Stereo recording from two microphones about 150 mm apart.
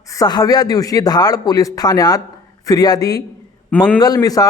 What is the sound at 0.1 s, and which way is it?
Speech, 25° left (ahead or behind).